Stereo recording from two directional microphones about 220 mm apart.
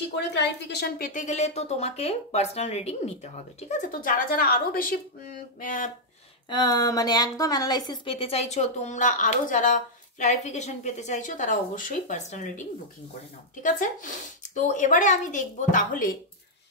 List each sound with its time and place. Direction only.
0.1 s a woman's voice: 50° left (ahead or behind)
6.5 s a woman's voice: 15° left (ahead or behind); by 16.2 s 40° left (ahead or behind)